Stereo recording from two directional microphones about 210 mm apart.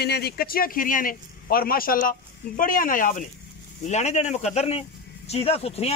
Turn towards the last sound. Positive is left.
turn(degrees=30)  # may be behind; listen again after turning